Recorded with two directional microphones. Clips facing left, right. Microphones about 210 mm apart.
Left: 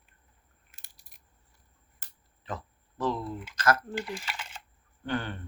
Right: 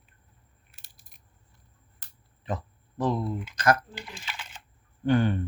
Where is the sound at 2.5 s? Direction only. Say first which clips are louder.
Right 5 dB; 15° right (ahead or behind).